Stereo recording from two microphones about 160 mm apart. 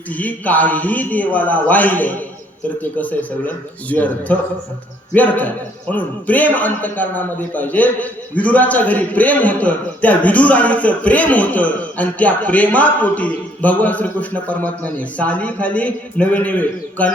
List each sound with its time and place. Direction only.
0.1 s speech: 10° left (ahead or behind)